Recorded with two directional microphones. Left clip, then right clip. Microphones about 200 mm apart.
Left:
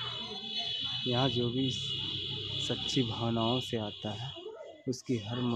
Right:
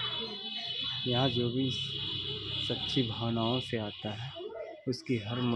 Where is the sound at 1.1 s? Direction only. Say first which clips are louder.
Right 1 dB; centre (ahead or behind).